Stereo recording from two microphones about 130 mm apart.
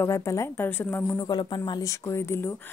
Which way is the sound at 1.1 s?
35° left (ahead or behind).